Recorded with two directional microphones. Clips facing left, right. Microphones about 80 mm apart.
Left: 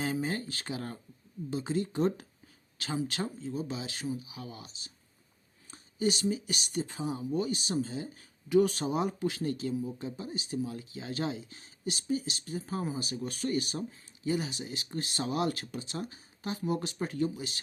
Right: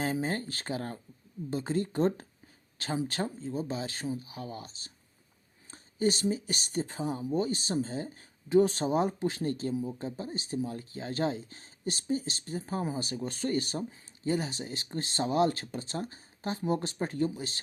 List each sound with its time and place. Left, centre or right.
0.0 s speech: right